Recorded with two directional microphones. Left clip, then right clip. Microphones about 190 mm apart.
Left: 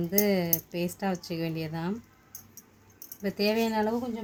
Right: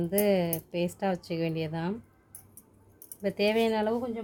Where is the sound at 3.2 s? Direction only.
15° right (ahead or behind).